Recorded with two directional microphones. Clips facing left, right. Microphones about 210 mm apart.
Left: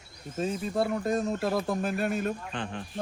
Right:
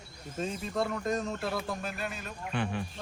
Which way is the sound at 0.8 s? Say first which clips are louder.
Left 3 dB; 30° left (ahead or behind).